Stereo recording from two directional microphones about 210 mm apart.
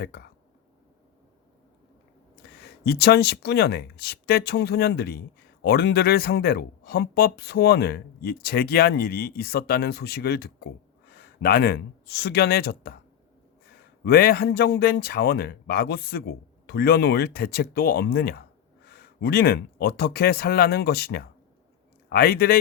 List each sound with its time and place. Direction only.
0.0 s speech: 50° left (ahead or behind)
2.8 s speech: 50° left (ahead or behind)
14.0 s speech: 45° left (ahead or behind)